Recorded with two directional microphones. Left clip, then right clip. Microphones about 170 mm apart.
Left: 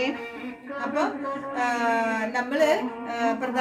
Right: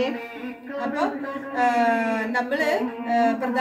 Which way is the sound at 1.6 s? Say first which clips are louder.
Right 4 dB; 15° left (ahead or behind).